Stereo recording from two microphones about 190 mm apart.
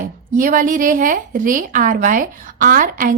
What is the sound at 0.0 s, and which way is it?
A woman's voice, 45° right (ahead or behind).